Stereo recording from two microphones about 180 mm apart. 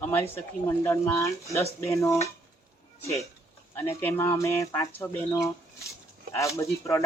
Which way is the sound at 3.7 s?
10° left (ahead or behind).